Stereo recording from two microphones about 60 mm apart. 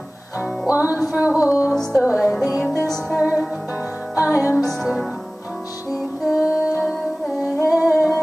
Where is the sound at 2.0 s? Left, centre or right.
Centre.